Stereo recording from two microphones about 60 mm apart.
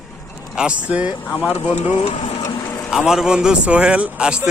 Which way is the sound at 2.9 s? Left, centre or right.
Centre.